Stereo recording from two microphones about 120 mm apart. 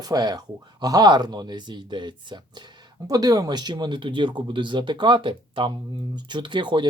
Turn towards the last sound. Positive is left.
turn(degrees=-40)  # may be behind; listen again after turning